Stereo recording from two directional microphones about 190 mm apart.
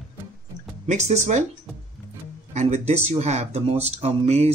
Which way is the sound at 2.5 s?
35° right (ahead or behind).